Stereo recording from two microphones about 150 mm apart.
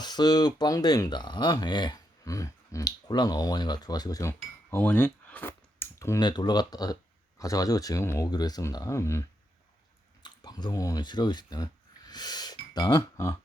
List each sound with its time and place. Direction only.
0.0 s speech: 30° left (ahead or behind)
6.1 s speech: 30° left (ahead or behind)
10.2 s speech: 30° left (ahead or behind)